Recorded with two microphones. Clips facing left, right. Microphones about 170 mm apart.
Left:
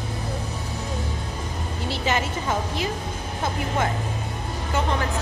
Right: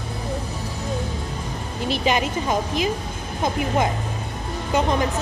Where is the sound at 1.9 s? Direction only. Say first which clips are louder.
Right 4 dB; 15° right (ahead or behind).